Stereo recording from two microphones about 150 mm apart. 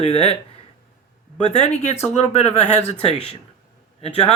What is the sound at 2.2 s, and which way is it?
Speech, 45° left (ahead or behind).